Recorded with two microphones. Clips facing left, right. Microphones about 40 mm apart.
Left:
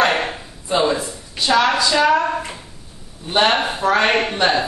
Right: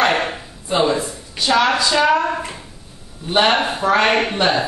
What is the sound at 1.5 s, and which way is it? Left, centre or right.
Speech, centre.